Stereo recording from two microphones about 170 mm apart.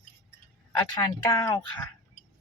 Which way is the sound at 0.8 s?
15° left (ahead or behind).